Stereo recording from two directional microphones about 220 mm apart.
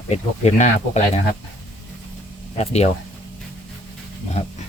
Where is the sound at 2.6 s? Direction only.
30° left (ahead or behind).